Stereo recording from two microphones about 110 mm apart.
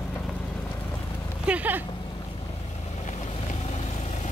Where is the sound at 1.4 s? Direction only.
15° right (ahead or behind).